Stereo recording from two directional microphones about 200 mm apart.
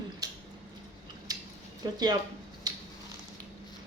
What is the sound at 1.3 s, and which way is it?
Scissors, 20° right (ahead or behind).